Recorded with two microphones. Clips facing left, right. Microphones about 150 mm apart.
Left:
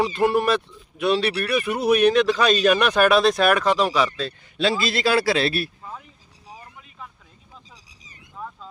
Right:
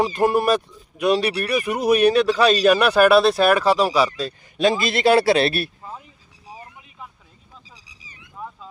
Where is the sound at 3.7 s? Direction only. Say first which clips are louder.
Right 2 dB; 10° right (ahead or behind).